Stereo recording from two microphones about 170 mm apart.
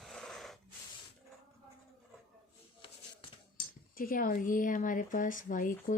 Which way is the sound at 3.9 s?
55° left (ahead or behind).